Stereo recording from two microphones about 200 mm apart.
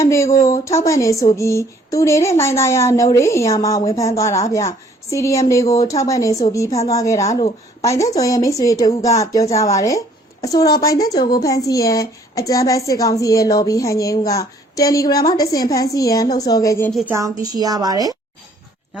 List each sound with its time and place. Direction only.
0.0 s a woman's voice: 15° left (ahead or behind)
17.1 s a woman's voice: 15° right (ahead or behind)